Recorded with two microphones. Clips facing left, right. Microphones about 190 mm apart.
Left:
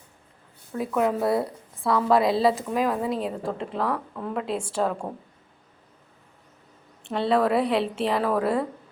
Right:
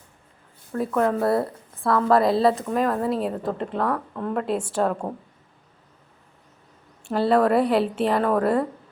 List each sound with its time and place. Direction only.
0.7 s a woman's voice: 5° left (ahead or behind)
7.1 s a woman's voice: centre (ahead or behind)